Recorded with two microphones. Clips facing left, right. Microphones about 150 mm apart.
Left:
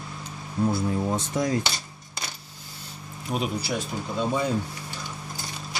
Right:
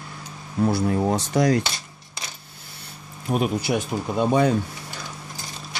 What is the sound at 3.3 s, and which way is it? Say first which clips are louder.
Speech: right 5 dB; 55° right (ahead or behind).